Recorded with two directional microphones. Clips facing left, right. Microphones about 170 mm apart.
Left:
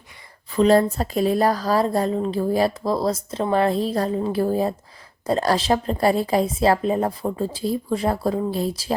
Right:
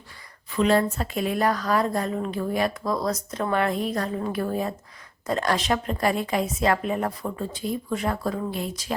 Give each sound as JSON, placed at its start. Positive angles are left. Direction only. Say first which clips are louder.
{"t": 0.5, "sound": "speech", "louder": "left 5 dB", "side_deg": 35}